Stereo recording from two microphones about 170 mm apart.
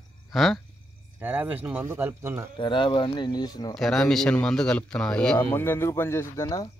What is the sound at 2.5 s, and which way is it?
Speech, 30° left (ahead or behind).